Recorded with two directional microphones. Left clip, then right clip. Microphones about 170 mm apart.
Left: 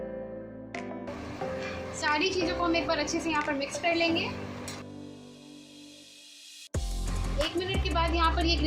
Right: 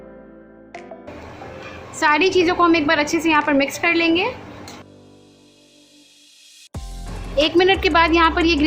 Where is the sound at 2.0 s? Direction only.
50° right (ahead or behind).